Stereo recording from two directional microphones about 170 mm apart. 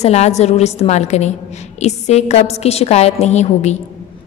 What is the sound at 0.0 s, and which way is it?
A woman's voice, 40° left (ahead or behind).